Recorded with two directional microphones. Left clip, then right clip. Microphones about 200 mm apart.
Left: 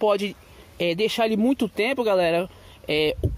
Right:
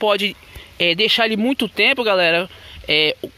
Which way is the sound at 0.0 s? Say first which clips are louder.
Right 4 dB; centre (ahead or behind).